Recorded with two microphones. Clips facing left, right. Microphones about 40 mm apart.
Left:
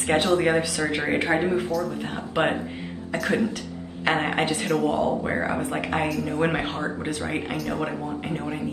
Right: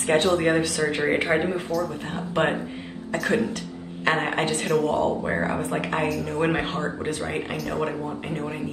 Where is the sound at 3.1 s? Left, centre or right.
Centre.